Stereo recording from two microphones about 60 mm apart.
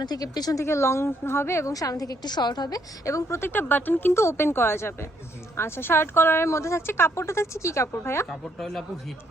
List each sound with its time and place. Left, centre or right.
0.2 s speech: left
0.6 s speech: left
1.6 s a woman's voice: left
3.2 s speech: left
4.1 s speech: left
8.3 s a woman's voice: centre